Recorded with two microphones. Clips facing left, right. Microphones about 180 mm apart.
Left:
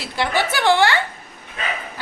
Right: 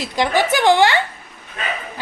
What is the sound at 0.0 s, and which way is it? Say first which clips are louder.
Speech: right 4 dB; 15° right (ahead or behind).